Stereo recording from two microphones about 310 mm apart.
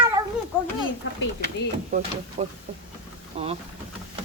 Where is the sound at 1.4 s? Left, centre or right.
Right.